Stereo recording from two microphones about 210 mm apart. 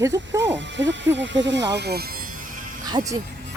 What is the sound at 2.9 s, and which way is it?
Speech, 20° right (ahead or behind).